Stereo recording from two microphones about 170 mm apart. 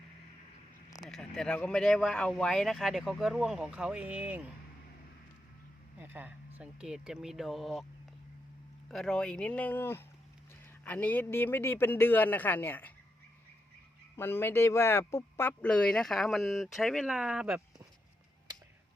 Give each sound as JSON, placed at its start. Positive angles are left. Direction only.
{"t": 0.9, "sound": "a sound", "side_deg": 20}
{"t": 1.1, "sound": "speech", "side_deg": 0}
{"t": 6.0, "sound": "speech", "side_deg": -10}
{"t": 8.9, "sound": "speech", "side_deg": 5}
{"t": 14.2, "sound": "speech", "side_deg": 15}